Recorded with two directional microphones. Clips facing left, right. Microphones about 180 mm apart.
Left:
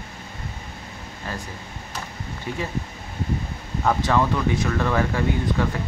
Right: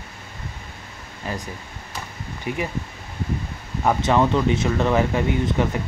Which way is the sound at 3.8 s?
20° right (ahead or behind).